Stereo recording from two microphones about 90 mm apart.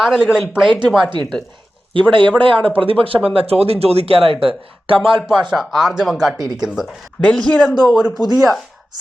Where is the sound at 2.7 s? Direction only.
85° right.